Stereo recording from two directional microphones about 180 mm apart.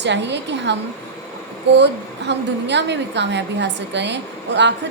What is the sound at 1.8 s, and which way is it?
A woman's voice, 75° right (ahead or behind).